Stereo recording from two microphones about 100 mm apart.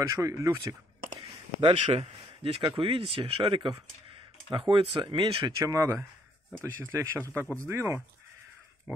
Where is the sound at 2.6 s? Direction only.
55° right (ahead or behind).